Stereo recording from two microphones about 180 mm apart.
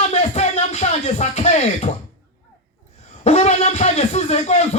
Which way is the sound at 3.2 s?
40° left (ahead or behind).